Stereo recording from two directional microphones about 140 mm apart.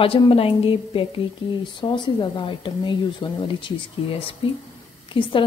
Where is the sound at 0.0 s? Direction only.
40° left (ahead or behind).